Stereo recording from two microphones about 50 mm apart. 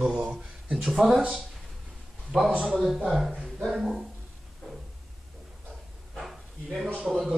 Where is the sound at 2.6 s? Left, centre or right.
Centre.